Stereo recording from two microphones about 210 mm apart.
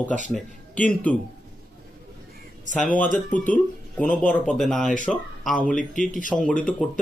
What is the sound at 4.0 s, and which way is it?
Speech, 5° left (ahead or behind).